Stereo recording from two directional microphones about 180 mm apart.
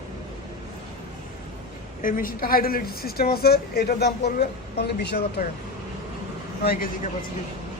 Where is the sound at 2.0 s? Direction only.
50° left (ahead or behind).